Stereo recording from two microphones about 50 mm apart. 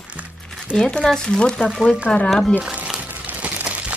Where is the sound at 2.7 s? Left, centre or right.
Centre.